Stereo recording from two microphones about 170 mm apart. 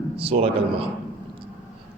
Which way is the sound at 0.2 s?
35° right (ahead or behind).